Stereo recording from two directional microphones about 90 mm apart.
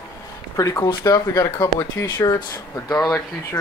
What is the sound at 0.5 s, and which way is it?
Speech, 35° left (ahead or behind).